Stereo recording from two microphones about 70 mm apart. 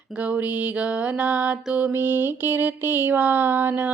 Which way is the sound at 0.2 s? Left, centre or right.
Right.